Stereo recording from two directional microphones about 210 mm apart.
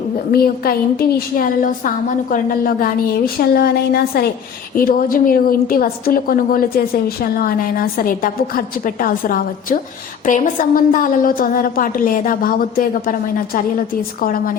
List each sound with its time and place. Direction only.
0.3 s a woman's voice: 45° left (ahead or behind)